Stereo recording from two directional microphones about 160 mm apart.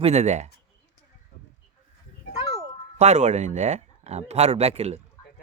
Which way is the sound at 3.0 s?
45° right (ahead or behind).